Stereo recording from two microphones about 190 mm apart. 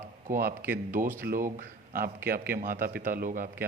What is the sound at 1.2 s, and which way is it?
A man's voice, 45° right (ahead or behind).